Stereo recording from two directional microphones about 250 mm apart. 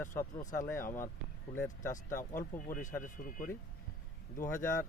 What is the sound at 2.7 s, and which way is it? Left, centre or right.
Speech, left.